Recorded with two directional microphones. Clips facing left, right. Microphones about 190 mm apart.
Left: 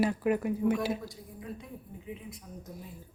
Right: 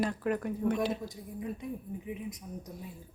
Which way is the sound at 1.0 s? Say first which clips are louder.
Right 4 dB; 20° right (ahead or behind).